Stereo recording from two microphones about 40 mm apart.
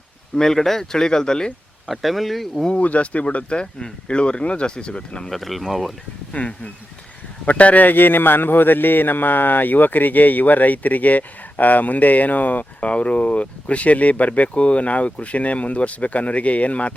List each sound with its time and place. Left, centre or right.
0.3 s speech: centre
1.9 s speech: centre
2.8 s speech: left
5.3 s speech: centre
6.3 s speech: left
7.9 s speech: left
12.8 s speech: left